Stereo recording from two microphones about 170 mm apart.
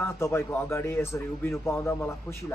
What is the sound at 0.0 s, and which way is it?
A man's voice, 15° left (ahead or behind).